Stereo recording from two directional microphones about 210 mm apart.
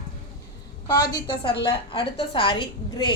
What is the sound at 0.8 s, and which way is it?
A woman's voice, 20° left (ahead or behind).